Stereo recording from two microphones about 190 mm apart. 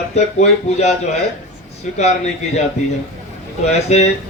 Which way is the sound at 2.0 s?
35° left (ahead or behind).